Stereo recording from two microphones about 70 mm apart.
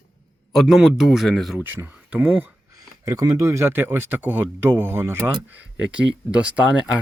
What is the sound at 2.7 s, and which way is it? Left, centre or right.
Speech, right.